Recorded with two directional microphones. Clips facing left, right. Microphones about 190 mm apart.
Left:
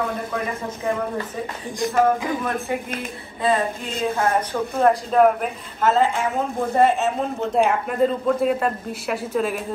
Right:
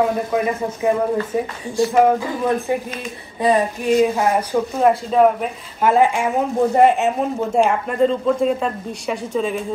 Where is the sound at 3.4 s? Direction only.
15° right (ahead or behind).